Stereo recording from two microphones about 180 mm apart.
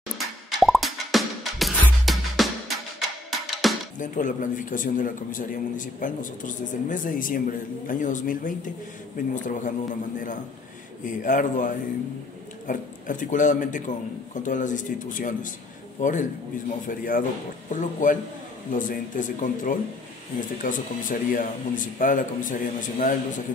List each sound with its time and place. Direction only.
0.6 s music: centre (ahead or behind)
4.0 s a man's voice: 45° left (ahead or behind)
11.1 s a man's voice: 45° left (ahead or behind)